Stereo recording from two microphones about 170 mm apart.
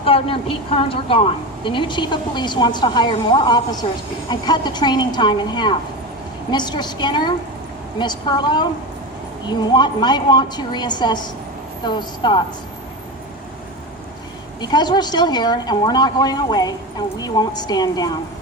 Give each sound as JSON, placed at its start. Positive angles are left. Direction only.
{"t": 0.0, "sound": "a woman's voice", "side_deg": 30}
{"t": 14.6, "sound": "a woman's voice", "side_deg": 25}